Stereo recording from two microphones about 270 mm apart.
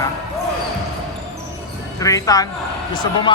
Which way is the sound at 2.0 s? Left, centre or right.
Centre.